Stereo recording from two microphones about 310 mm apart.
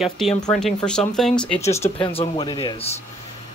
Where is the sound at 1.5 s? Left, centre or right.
Left.